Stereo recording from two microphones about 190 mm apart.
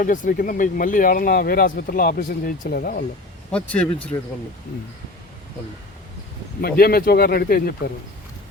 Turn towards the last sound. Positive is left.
turn(degrees=50)  # may be behind; listen again after turning